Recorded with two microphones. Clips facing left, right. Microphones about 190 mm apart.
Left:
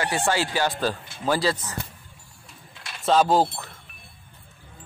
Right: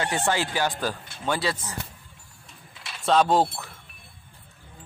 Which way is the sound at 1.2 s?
Centre (ahead or behind).